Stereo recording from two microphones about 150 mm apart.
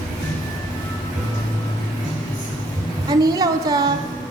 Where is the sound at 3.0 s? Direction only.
25° right (ahead or behind).